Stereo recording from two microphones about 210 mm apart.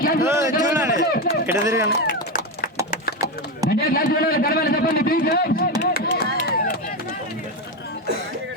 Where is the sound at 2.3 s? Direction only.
40° left (ahead or behind).